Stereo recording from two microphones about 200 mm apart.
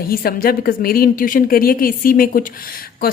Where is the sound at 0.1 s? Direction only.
45° left (ahead or behind).